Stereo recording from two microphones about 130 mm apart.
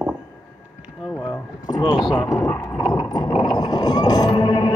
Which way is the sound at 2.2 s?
25° left (ahead or behind).